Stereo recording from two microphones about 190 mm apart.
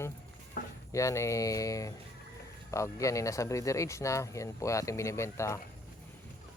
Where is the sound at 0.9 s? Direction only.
15° left (ahead or behind).